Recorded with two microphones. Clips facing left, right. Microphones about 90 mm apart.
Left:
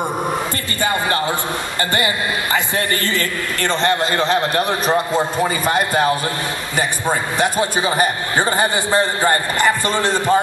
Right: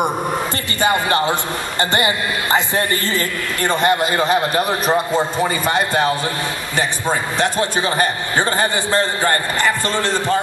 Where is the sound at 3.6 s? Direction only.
10° right (ahead or behind).